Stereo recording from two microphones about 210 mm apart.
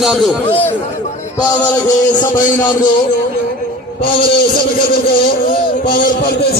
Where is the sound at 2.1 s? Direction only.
40° left (ahead or behind).